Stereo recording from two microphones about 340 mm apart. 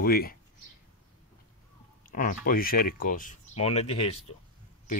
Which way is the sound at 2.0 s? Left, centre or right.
Left.